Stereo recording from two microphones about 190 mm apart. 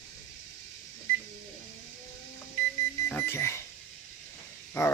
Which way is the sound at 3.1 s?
10° left (ahead or behind).